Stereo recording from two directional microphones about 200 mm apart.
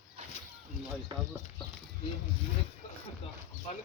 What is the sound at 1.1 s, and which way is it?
Speech, 20° right (ahead or behind).